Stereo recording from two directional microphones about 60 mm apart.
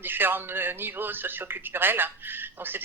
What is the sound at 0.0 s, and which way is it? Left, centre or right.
A man's voice, right.